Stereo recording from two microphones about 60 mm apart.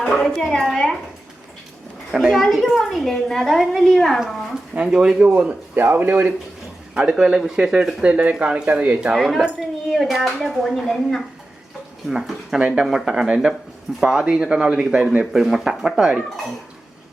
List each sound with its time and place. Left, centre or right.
0.0 s a woman's voice: centre
2.1 s a woman's voice: centre
4.7 s speech: centre
5.7 s speech: right
6.9 s speech: centre
9.1 s a woman's voice: centre
9.4 s a woman's voice: centre
12.5 s speech: centre
12.8 s a woman's voice: centre